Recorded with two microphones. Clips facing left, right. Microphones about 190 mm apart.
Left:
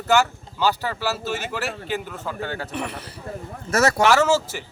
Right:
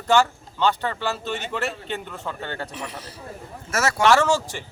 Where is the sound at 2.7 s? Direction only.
60° left (ahead or behind).